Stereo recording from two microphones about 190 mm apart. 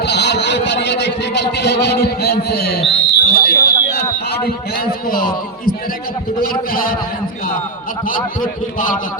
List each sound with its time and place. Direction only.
0.0 s a sound: 65° left (ahead or behind)
4.4 s a man's voice: 50° left (ahead or behind)
8.0 s a man's voice: 45° left (ahead or behind)